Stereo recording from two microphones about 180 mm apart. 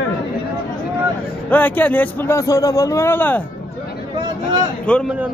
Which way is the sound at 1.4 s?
10° left (ahead or behind).